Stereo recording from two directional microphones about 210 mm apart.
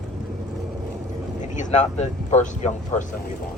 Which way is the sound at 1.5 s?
35° left (ahead or behind).